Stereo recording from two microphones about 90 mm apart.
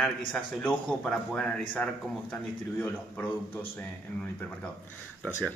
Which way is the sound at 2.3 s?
25° left (ahead or behind).